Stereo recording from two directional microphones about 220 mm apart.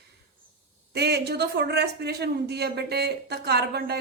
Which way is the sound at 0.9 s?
50° right (ahead or behind).